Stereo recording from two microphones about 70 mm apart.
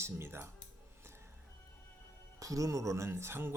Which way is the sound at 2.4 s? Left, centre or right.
Right.